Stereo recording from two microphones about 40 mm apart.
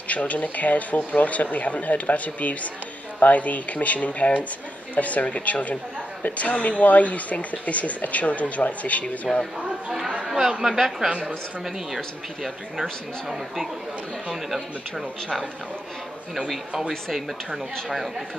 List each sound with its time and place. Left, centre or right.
0.1 s speech: left
10.2 s chatter: centre
10.6 s a woman's voice: centre
11.1 s a woman's voice: right
14.3 s speech: centre